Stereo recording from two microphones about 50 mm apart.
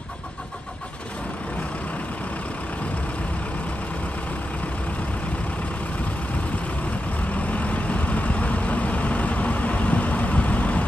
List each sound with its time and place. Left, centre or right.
7.4 s vehicle: left